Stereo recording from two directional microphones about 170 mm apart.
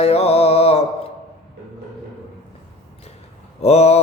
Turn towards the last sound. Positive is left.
turn(degrees=35)  # may be behind; listen again after turning